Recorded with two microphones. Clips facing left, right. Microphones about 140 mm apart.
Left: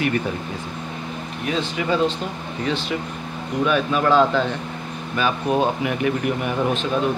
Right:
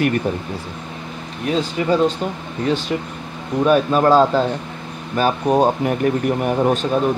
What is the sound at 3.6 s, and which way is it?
Speech, 40° right (ahead or behind).